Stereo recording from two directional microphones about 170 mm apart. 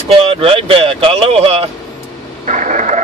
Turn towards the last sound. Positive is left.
turn(degrees=-45)  # may be behind; listen again after turning